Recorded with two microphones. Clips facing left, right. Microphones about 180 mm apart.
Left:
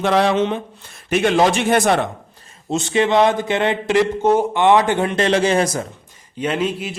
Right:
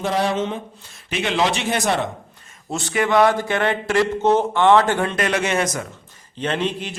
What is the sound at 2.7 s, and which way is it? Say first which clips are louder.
A man's voice: left 3 dB; 20° left (ahead or behind).